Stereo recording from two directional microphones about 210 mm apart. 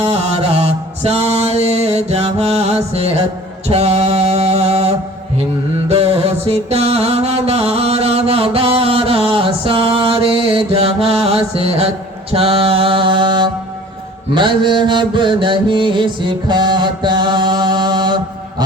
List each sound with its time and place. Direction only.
0.0 s mantra: 30° right (ahead or behind)
3.7 s music: 30° right (ahead or behind)
5.9 s mantra: 30° right (ahead or behind)